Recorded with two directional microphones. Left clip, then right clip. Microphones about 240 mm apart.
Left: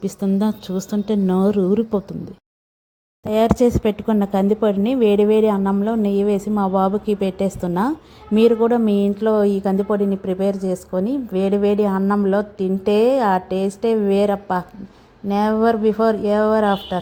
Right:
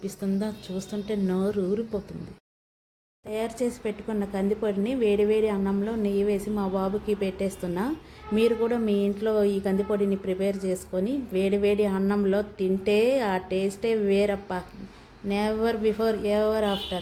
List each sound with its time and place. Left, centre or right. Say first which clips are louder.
0.0 s a woman's voice: left 9 dB; left
3.2 s a woman's voice: left 13 dB; left